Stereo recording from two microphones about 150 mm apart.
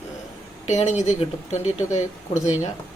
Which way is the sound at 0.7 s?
50° left (ahead or behind).